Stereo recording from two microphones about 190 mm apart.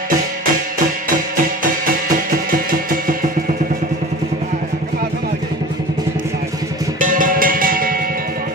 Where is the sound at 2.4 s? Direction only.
50° right (ahead or behind).